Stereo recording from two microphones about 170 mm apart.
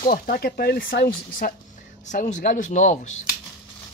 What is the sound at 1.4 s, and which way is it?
Speech, 55° left (ahead or behind).